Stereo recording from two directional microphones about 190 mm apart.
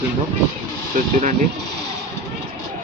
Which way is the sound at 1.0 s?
45° right (ahead or behind).